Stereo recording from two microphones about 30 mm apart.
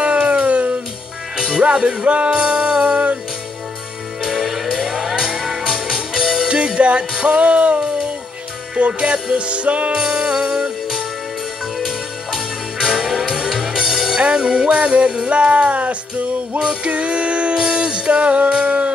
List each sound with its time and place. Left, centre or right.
0.0 s music: right
1.3 s music: right
1.6 s music: right
4.2 s music: centre
6.8 s music: right
9.0 s music: right
9.4 s music: right
10.2 s music: right
11.8 s music: centre
12.8 s music: centre
14.1 s music: right
15.2 s music: right
16.8 s music: right
18.5 s humming: right